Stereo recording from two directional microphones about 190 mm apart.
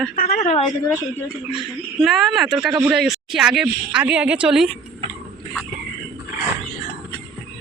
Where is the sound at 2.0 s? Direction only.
Centre (ahead or behind).